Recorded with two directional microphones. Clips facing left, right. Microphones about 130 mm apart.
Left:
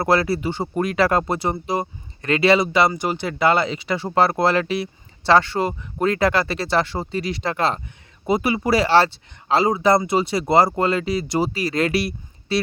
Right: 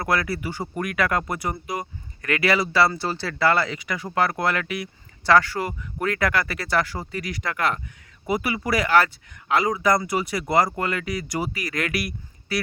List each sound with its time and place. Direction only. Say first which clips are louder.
0.0 s speech: left 6 dB; 30° left (ahead or behind)